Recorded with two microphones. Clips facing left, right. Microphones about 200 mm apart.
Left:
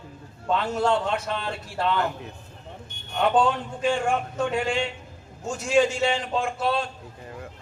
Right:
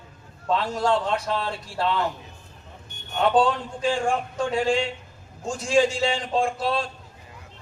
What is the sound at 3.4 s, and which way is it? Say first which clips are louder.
A man's voice: right 1 dB; 30° right (ahead or behind).